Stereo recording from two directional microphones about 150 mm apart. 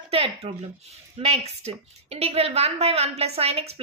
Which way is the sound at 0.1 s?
40° right (ahead or behind).